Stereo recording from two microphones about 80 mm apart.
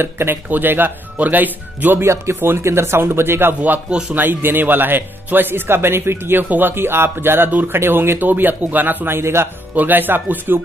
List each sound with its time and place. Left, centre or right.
0.0 s speech: right